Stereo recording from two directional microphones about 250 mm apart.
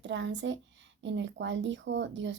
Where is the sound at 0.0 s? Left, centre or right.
Right.